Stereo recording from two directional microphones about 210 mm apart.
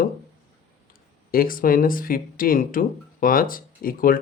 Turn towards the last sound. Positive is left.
turn(degrees=40)  # may be behind; listen again after turning